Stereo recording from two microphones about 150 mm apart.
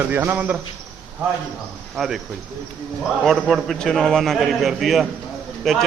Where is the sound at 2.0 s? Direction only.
Centre (ahead or behind).